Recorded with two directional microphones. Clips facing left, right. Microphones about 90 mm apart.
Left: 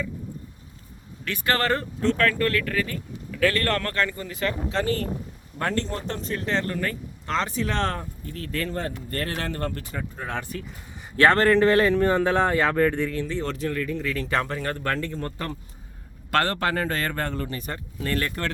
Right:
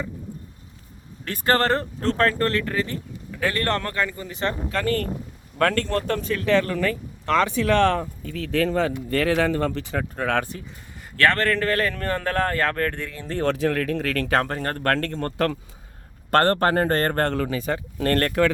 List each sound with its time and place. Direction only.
1.2 s speech: 35° right (ahead or behind); by 4.3 s 10° right (ahead or behind)
4.3 s speech: 30° right (ahead or behind)
4.7 s speech: 55° right (ahead or behind)
5.5 s speech: 65° right (ahead or behind)
8.4 s speech: 90° right; by 10.5 s 75° right (ahead or behind)
11.2 s speech: 25° left (ahead or behind); by 13.1 s 5° left (ahead or behind)
13.4 s speech: 80° right; by 14.9 s 50° right (ahead or behind)
14.9 s speech: 65° right (ahead or behind)
16.3 s speech: 45° right (ahead or behind)
17.2 s speech: 80° right; by 18.4 s 60° right (ahead or behind)